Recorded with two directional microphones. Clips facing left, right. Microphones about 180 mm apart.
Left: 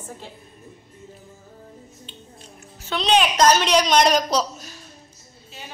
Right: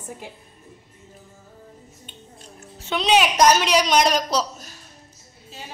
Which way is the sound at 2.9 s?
10° right (ahead or behind).